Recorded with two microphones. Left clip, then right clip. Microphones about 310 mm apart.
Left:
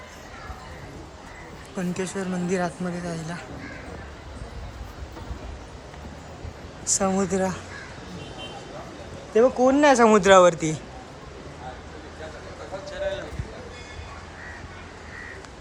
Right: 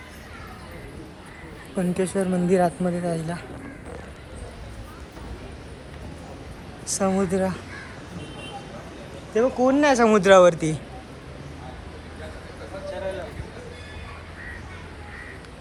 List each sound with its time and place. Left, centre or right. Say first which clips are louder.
1.7 s a woman's voice: right 5 dB; centre
6.8 s speech: even; centre
9.3 s speech: left 2 dB; centre